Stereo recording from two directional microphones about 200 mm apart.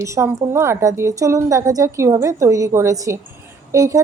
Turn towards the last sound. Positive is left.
turn(degrees=-15)  # may be behind; listen again after turning